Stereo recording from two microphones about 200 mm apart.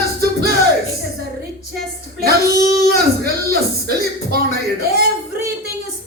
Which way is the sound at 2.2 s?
50° right (ahead or behind).